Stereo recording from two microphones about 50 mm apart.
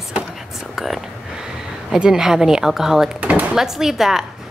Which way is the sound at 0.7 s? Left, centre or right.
Centre.